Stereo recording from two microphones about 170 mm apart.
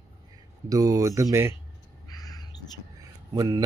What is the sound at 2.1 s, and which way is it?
Bird, 20° left (ahead or behind).